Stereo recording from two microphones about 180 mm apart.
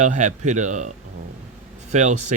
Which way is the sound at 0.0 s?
45° right (ahead or behind).